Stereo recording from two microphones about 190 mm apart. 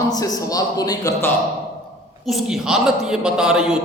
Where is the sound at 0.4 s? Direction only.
20° left (ahead or behind).